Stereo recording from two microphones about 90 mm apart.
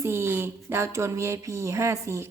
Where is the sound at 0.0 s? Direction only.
30° right (ahead or behind).